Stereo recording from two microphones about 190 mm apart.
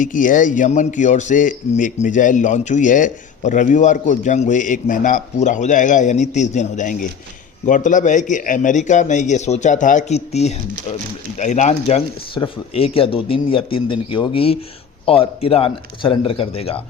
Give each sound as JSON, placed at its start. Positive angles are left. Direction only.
{"t": 0.0, "sound": "a man's voice", "side_deg": 45}